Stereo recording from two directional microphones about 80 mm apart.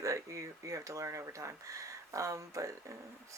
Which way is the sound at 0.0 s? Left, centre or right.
Right.